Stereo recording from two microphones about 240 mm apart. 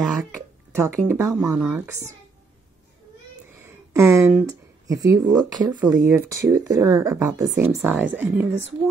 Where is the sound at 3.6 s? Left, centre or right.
Centre.